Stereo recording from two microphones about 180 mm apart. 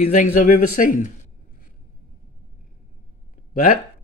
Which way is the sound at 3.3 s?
45° left (ahead or behind).